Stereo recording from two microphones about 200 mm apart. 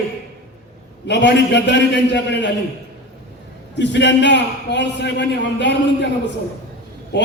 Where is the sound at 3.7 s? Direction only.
60° left (ahead or behind).